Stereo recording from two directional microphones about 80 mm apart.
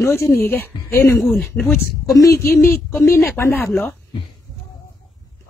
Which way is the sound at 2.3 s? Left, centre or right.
Left.